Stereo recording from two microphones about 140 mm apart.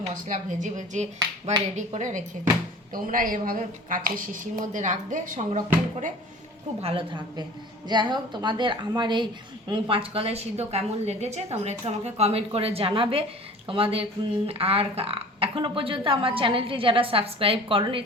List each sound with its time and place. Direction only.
0.1 s a woman's voice: 65° right (ahead or behind)
2.9 s a woman's voice: 80° right
6.8 s a woman's voice: 35° right (ahead or behind)